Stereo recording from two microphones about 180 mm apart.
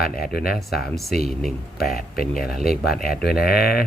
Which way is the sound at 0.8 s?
Centre (ahead or behind).